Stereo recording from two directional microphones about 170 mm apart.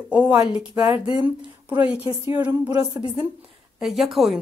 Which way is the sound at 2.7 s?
25° right (ahead or behind).